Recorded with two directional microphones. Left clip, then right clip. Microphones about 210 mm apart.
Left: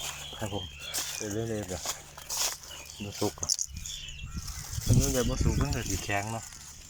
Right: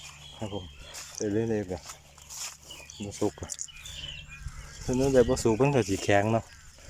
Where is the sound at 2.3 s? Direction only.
30° left (ahead or behind).